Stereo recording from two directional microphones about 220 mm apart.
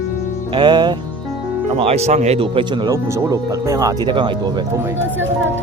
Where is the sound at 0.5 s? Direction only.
20° right (ahead or behind).